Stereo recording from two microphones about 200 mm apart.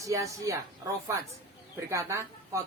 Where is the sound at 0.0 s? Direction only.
15° right (ahead or behind).